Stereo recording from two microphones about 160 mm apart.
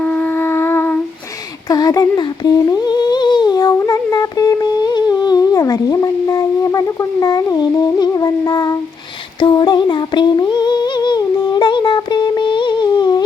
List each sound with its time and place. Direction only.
0.0 s music: 10° left (ahead or behind)
1.6 s humming: 25° left (ahead or behind)
9.4 s female singing: 30° left (ahead or behind)